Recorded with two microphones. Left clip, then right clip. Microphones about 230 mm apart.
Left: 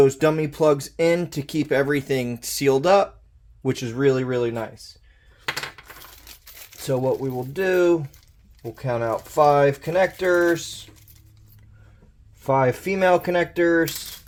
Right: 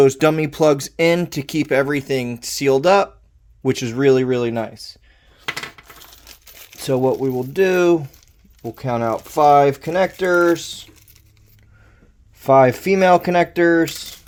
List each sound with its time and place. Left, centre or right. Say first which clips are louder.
0.0 s speech: right 4 dB; right
3.6 s speech: right 4 dB; right
6.0 s tearing: right 2 dB; right
6.7 s speech: right 5 dB; right
12.4 s speech: right 8 dB; right